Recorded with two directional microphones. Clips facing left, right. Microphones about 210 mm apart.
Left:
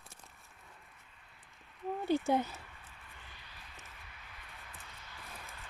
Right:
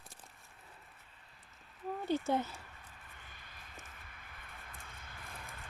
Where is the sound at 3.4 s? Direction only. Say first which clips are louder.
Right 1 dB; 50° right (ahead or behind).